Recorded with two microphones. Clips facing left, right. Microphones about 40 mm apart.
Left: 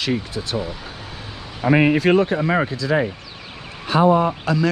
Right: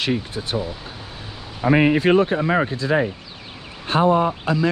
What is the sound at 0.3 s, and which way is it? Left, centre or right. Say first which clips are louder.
Speech: even; right.